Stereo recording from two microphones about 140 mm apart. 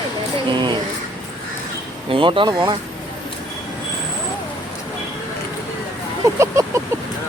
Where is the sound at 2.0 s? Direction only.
40° right (ahead or behind).